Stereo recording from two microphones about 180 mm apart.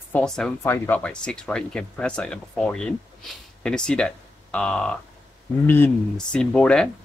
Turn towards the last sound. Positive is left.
turn(degrees=5)  # may be behind; listen again after turning